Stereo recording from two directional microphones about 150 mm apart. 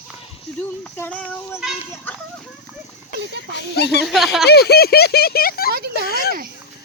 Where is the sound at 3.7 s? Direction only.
90° left.